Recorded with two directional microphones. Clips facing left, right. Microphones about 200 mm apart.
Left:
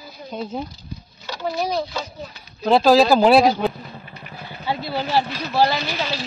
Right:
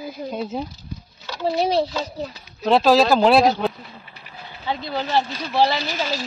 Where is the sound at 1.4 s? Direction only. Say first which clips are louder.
Right 4 dB; 30° right (ahead or behind).